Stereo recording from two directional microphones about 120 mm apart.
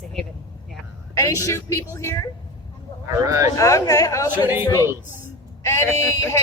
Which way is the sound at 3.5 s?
30° left (ahead or behind).